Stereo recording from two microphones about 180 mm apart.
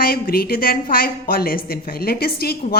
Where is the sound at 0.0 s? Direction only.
55° left (ahead or behind).